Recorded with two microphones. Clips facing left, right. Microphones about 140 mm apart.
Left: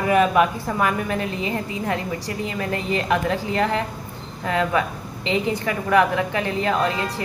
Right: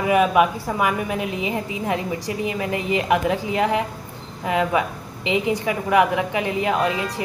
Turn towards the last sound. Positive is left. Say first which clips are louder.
# right 1 dB
turn(degrees=-15)  # may be behind; listen again after turning